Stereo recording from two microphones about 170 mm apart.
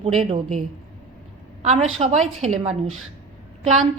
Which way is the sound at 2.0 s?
40° right (ahead or behind).